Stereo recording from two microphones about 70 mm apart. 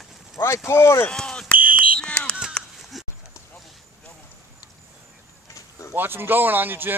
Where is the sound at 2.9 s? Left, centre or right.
Centre.